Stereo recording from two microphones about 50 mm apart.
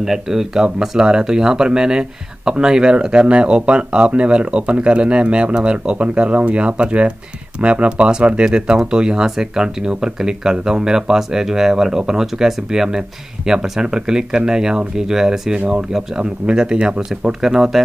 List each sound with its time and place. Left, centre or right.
0.0 s speech: centre